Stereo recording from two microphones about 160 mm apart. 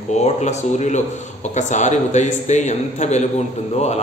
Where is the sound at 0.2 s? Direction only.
45° left (ahead or behind).